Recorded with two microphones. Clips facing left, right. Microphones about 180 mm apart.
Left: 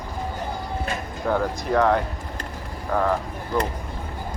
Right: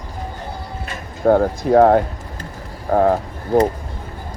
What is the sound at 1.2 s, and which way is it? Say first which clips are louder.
Speech: right 9 dB; 50° right (ahead or behind).